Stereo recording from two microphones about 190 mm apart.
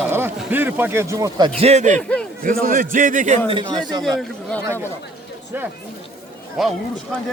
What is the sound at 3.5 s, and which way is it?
Speech, 25° right (ahead or behind).